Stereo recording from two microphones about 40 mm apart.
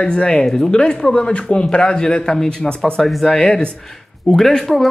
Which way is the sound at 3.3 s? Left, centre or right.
Left.